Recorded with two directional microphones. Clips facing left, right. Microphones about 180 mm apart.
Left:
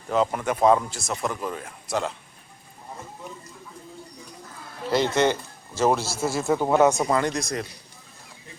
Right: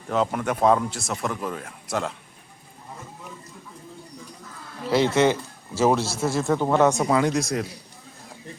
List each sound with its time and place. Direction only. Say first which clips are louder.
0.1 s a man's voice: even; centre (ahead or behind)
4.9 s a man's voice: right 2 dB; centre (ahead or behind)